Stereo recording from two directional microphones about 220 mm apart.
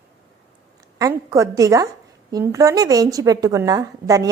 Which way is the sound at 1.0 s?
15° right (ahead or behind).